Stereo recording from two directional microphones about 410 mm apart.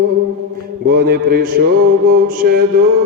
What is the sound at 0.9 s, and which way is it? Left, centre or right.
Mantra, right.